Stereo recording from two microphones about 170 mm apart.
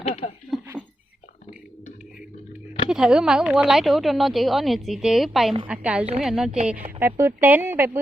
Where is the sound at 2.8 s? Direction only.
5° right (ahead or behind).